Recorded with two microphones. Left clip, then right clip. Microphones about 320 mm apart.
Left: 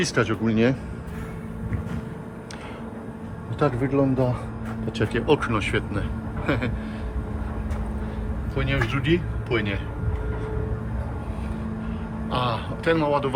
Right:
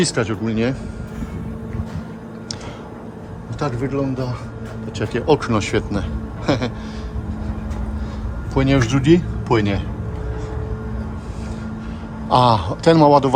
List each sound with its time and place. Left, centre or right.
0.0 s speech: centre
3.6 s a man's voice: centre
8.5 s speech: right
12.3 s a man's voice: centre